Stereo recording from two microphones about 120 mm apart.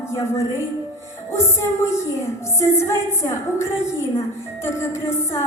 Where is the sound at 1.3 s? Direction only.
20° left (ahead or behind).